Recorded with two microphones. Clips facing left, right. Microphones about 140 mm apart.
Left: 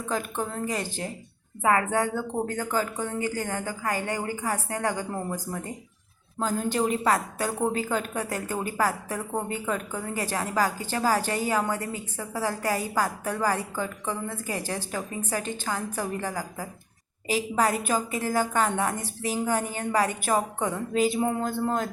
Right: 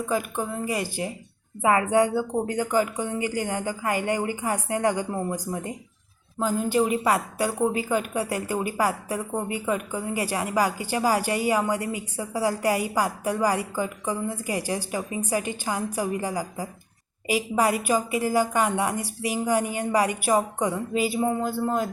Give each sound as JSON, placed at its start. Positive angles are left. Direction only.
{"t": 0.0, "sound": "a woman's voice", "side_deg": -10}